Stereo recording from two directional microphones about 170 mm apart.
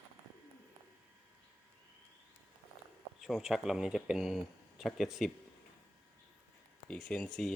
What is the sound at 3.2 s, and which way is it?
Speech, centre (ahead or behind).